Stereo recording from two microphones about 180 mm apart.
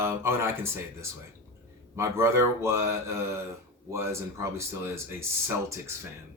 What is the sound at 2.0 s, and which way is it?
Speech, 15° right (ahead or behind).